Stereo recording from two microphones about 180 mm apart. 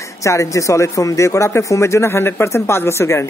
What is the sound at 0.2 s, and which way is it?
Speech, 15° left (ahead or behind).